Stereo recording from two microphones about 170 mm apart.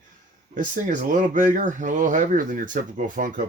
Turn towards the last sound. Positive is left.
turn(degrees=-50)  # may be behind; listen again after turning